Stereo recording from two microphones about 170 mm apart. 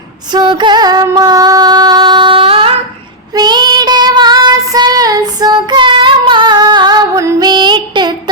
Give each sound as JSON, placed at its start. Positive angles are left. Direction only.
{"t": 0.3, "sound": "music", "side_deg": -25}
{"t": 3.3, "sound": "child singing", "side_deg": -25}